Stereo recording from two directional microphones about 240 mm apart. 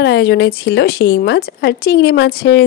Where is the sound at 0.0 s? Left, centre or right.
Left.